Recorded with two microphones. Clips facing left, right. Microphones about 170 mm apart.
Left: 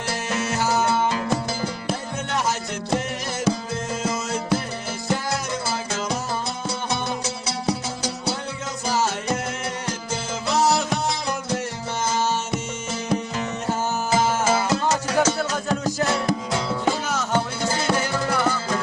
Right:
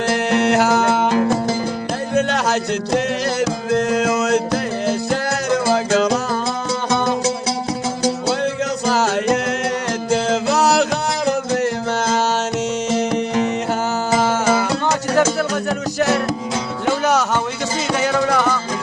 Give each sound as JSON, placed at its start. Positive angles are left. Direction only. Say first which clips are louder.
{"t": 0.1, "sound": "music", "louder": "right 9 dB", "side_deg": -65}
{"t": 2.1, "sound": "music", "louder": "right 10 dB", "side_deg": -75}
{"t": 8.9, "sound": "music", "louder": "right 6 dB", "side_deg": -80}
{"t": 14.2, "sound": "music", "louder": "right 3 dB", "side_deg": -65}
{"t": 17.1, "sound": "music", "louder": "right 6 dB", "side_deg": -75}
{"t": 17.9, "sound": "music", "louder": "right 6 dB", "side_deg": -90}